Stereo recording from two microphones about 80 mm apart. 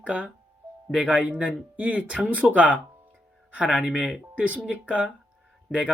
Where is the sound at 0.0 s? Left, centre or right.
Centre.